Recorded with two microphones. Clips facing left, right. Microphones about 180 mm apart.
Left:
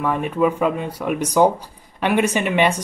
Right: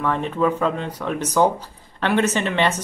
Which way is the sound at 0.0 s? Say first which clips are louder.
Left 2 dB; 10° left (ahead or behind).